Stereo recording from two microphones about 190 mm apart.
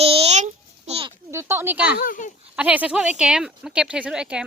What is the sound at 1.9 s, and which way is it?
Speech, 45° left (ahead or behind).